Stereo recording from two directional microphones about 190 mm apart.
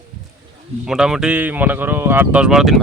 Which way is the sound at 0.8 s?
5° right (ahead or behind).